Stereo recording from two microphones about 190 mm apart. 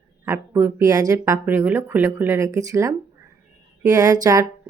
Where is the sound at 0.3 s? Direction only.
15° right (ahead or behind).